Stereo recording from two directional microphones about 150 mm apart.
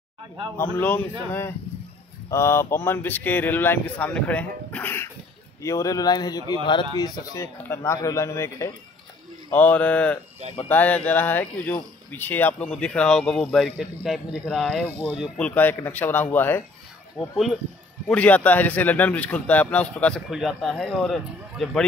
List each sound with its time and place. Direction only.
0.6 s speech: 15° left (ahead or behind)
2.3 s speech: 15° left (ahead or behind)
7.5 s speech: 20° left (ahead or behind)
9.5 s speech: 10° left (ahead or behind)
14.9 s speech: 10° right (ahead or behind)
15.3 s speech: 10° left (ahead or behind)
18.0 s speech: 10° left (ahead or behind)
20.2 s speech: 5° right (ahead or behind)